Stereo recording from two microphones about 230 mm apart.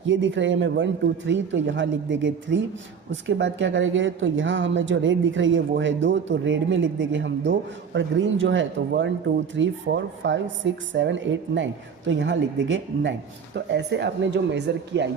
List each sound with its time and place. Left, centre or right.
0.0 s speech: right